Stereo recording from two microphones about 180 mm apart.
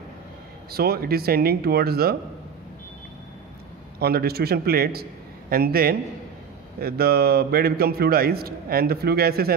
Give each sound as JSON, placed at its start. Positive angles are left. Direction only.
{"t": 0.7, "sound": "a man's voice", "side_deg": -60}
{"t": 4.0, "sound": "a man's voice", "side_deg": -60}